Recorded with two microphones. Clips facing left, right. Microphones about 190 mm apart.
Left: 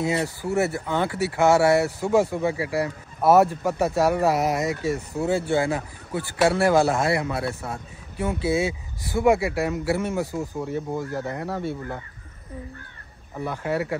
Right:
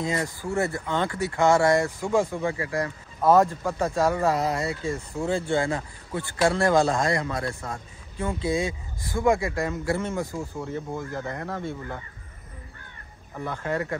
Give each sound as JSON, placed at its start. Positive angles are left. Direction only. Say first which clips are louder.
{"t": 0.2, "sound": "speech", "louder": "left 3 dB", "side_deg": 20}
{"t": 0.6, "sound": "speech", "louder": "left 2 dB", "side_deg": 5}
{"t": 2.0, "sound": "speech", "louder": "left 3 dB", "side_deg": 20}
{"t": 4.7, "sound": "speech", "louder": "left 4 dB", "side_deg": 70}
{"t": 5.2, "sound": "speech", "louder": "left 2 dB", "side_deg": 5}
{"t": 13.4, "sound": "speech", "louder": "left 2 dB", "side_deg": 10}